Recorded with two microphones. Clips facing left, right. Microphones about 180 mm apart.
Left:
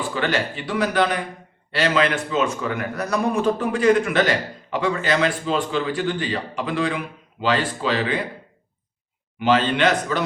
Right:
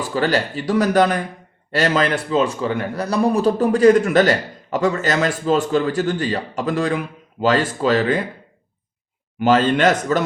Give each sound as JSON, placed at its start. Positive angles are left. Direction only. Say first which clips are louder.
{"t": 0.1, "sound": "a man's voice", "louder": "right 6 dB", "side_deg": -40}
{"t": 9.4, "sound": "a man's voice", "louder": "right 3 dB", "side_deg": -45}